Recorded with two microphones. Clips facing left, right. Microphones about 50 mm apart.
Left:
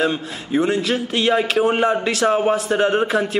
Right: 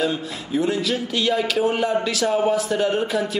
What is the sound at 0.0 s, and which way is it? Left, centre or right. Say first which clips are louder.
A man's voice: left 3 dB; left.